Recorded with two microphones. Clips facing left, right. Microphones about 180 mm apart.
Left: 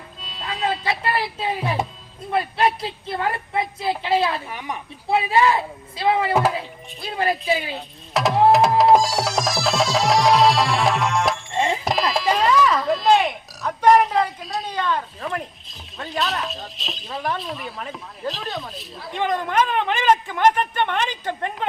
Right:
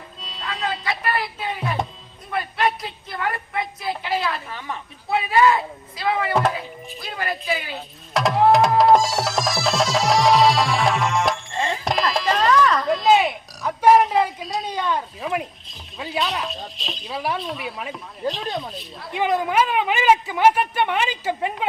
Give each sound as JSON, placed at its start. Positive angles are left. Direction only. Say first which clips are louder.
{"t": 0.2, "sound": "music", "louder": "left 1 dB", "side_deg": 0}
{"t": 0.6, "sound": "a woman's voice", "louder": "left 3 dB", "side_deg": 30}
{"t": 4.4, "sound": "speech", "louder": "left 1 dB", "side_deg": 15}
{"t": 5.0, "sound": "a woman's voice", "louder": "even", "side_deg": 25}
{"t": 7.8, "sound": "a sound", "louder": "even", "side_deg": 0}
{"t": 8.4, "sound": "music", "louder": "even", "side_deg": 0}
{"t": 11.5, "sound": "music", "louder": "left 3 dB", "side_deg": 20}
{"t": 11.9, "sound": "music", "louder": "left 1 dB", "side_deg": 0}
{"t": 14.7, "sound": "speech", "louder": "left 1 dB", "side_deg": -10}